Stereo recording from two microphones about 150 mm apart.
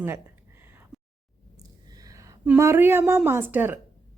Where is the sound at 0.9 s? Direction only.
Centre (ahead or behind).